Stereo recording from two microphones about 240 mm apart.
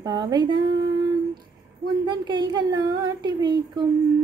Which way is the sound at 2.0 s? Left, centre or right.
Centre.